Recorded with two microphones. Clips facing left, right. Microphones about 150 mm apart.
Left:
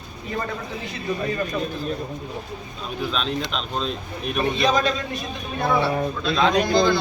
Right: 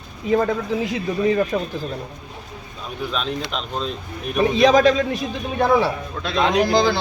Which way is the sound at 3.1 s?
10° right (ahead or behind).